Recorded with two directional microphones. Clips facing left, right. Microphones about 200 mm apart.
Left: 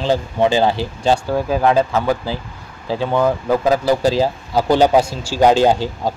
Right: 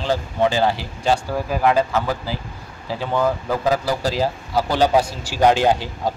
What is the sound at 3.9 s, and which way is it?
Speech, 20° left (ahead or behind).